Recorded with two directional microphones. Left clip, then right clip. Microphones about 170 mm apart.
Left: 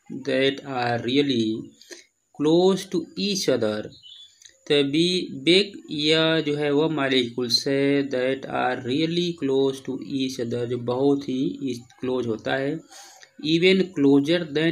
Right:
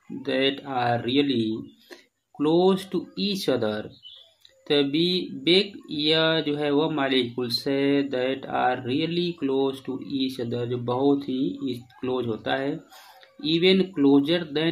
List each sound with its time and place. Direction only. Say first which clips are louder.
0.2 s speech: left 2 dB; 20° left (ahead or behind)